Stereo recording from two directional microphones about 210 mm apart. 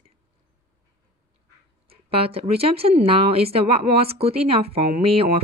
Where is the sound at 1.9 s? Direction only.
25° right (ahead or behind).